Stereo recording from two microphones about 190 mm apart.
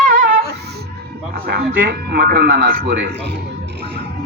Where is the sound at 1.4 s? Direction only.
55° right (ahead or behind).